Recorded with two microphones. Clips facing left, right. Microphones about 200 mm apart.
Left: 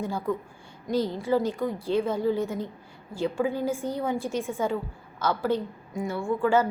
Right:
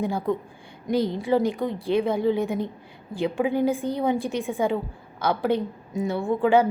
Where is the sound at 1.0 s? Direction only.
15° right (ahead or behind).